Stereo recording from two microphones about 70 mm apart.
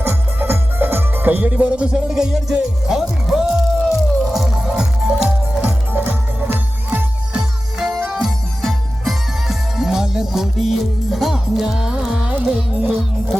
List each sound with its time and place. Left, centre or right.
0.0 s music: right; by 5.7 s centre
5.9 s music: right
7.9 s music: centre